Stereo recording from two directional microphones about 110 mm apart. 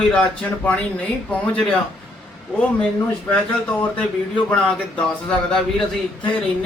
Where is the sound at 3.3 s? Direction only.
15° left (ahead or behind).